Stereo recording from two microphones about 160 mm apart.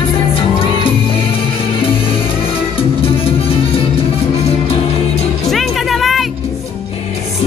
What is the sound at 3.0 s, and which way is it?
Music, 35° left (ahead or behind).